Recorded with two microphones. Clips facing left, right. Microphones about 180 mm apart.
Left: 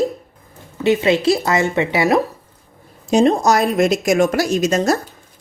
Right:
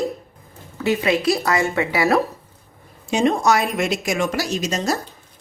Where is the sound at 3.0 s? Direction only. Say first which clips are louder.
Left 4 dB; 35° left (ahead or behind).